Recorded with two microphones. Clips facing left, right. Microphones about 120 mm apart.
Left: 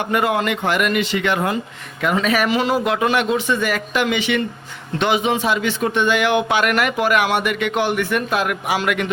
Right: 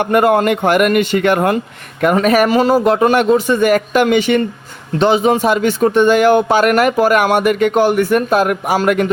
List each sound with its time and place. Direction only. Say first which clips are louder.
0.0 s a man's voice: right 7 dB; 50° right (ahead or behind)
4.9 s speech: right 6 dB; 35° right (ahead or behind)